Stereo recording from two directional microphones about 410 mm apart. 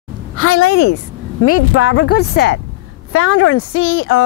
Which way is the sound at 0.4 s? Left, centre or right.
Left.